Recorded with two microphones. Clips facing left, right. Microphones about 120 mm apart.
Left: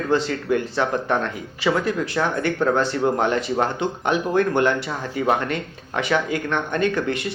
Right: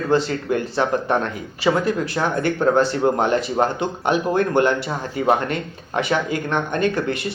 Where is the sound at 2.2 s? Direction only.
25° right (ahead or behind).